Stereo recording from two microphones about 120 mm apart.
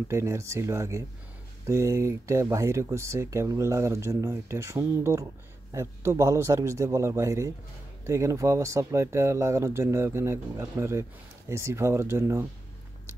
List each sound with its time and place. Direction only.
0.1 s speech: 25° right (ahead or behind)